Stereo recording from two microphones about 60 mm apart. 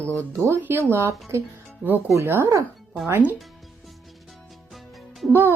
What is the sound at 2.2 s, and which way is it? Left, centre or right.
Speech, right.